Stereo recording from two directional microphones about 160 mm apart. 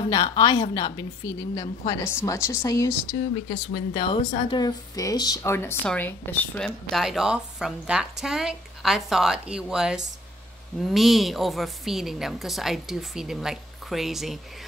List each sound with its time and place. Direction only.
0.1 s a woman's voice: 25° left (ahead or behind)
3.4 s a woman's voice: 30° left (ahead or behind); by 14.4 s centre (ahead or behind)